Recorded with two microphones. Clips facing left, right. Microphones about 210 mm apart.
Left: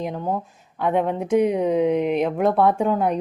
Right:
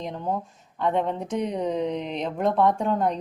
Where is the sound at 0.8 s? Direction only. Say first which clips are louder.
Left 3 dB; 10° left (ahead or behind).